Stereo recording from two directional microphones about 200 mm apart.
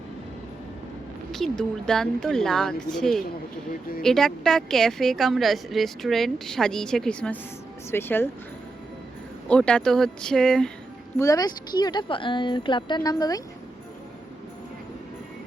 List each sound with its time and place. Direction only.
1.3 s a woman's voice: centre (ahead or behind)
9.5 s a woman's voice: 5° left (ahead or behind)
11.2 s a woman's voice: 15° left (ahead or behind)